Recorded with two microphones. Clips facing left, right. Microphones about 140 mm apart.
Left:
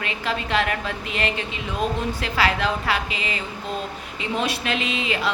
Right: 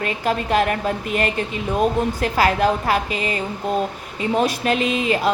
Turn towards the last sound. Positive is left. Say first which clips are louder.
# right 6 dB
turn(degrees=-45)  # may be behind; listen again after turning